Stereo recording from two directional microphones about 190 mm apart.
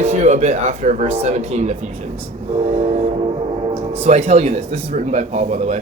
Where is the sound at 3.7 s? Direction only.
30° right (ahead or behind).